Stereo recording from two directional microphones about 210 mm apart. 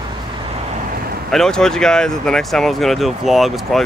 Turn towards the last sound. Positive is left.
turn(degrees=0)  # may be behind; listen again after turning